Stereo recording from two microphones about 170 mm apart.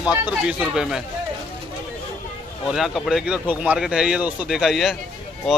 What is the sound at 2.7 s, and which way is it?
Speech, centre (ahead or behind).